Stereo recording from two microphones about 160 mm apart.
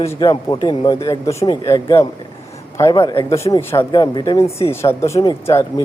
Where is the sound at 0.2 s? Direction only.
25° left (ahead or behind).